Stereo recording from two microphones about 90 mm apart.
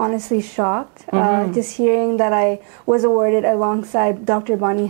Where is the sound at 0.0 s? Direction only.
25° right (ahead or behind).